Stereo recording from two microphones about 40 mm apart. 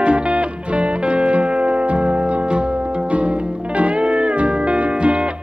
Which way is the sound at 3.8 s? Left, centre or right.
Right.